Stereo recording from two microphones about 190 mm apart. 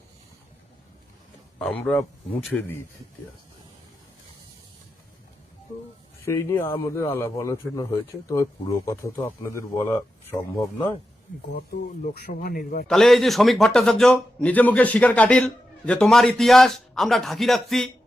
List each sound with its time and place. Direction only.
1.5 s a man's voice: 5° left (ahead or behind)
6.2 s a man's voice: 15° left (ahead or behind)
11.5 s a man's voice: 50° left (ahead or behind)
12.9 s a man's voice: centre (ahead or behind)